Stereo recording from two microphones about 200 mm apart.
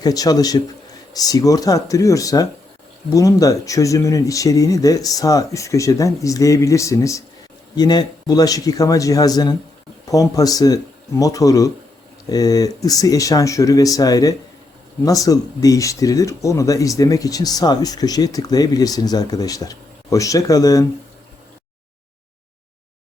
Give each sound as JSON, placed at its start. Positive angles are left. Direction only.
{"t": 0.0, "sound": "speech", "side_deg": 20}